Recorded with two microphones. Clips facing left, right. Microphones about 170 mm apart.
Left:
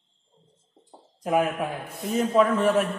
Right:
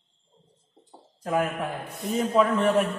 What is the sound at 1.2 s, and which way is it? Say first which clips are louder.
Speech: left 3 dB; 15° left (ahead or behind).